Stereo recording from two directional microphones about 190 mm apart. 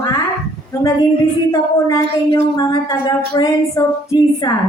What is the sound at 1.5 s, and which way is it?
A woman's voice, 20° left (ahead or behind).